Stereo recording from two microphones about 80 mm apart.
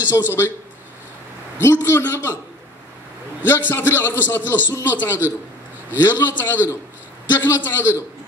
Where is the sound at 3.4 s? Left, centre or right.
Left.